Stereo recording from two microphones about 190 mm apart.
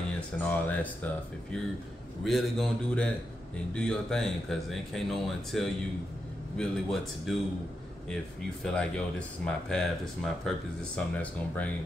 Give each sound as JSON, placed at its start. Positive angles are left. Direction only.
{"t": 0.1, "sound": "speech", "side_deg": 5}
{"t": 8.6, "sound": "speech", "side_deg": 5}